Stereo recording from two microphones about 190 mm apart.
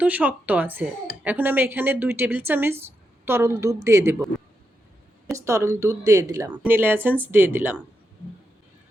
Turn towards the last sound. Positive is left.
turn(degrees=-10)  # may be behind; listen again after turning